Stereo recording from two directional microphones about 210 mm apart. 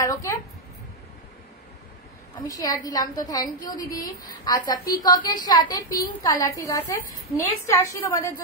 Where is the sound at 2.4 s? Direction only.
15° left (ahead or behind).